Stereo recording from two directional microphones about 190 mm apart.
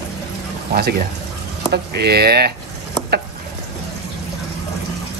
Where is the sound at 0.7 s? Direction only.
55° right (ahead or behind).